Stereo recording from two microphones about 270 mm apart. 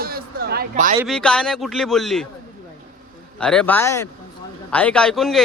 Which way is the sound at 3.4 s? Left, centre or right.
Centre.